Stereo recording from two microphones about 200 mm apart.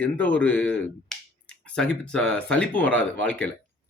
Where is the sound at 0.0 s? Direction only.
10° left (ahead or behind).